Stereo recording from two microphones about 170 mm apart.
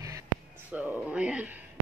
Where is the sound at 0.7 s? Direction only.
10° right (ahead or behind).